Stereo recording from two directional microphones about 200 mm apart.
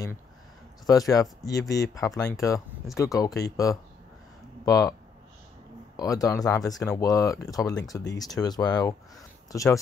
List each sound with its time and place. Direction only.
0.8 s speech: 15° left (ahead or behind)
5.9 s speech: 15° left (ahead or behind)